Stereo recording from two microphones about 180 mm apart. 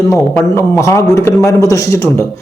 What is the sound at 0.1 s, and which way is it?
A man's voice, 15° left (ahead or behind).